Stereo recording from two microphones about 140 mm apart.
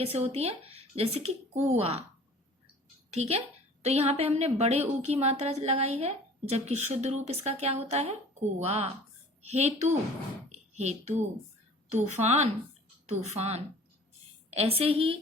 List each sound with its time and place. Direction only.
0.0 s a woman's voice: 50° right (ahead or behind)
3.1 s a woman's voice: 50° right (ahead or behind)